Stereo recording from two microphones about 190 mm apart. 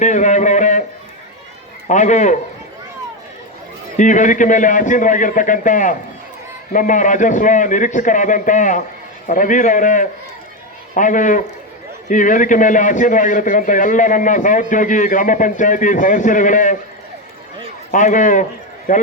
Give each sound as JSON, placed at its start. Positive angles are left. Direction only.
{"t": 0.0, "sound": "a sound", "side_deg": 40}
{"t": 1.9, "sound": "a man's voice", "side_deg": 40}
{"t": 3.9, "sound": "a man's voice", "side_deg": 40}
{"t": 17.9, "sound": "a man's voice", "side_deg": 40}